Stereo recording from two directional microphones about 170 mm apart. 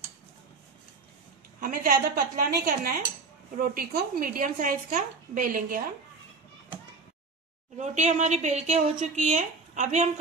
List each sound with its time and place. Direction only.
1.6 s speech: 55° right (ahead or behind)
7.7 s speech: 45° right (ahead or behind)